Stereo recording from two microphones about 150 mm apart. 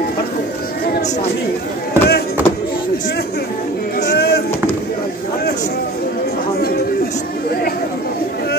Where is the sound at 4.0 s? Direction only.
90° left.